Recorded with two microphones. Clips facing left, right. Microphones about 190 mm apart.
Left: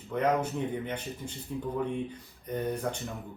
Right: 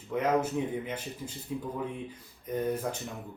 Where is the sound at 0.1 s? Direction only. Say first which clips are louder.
Even; 5° right (ahead or behind).